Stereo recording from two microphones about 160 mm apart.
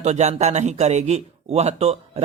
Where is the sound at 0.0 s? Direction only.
45° right (ahead or behind).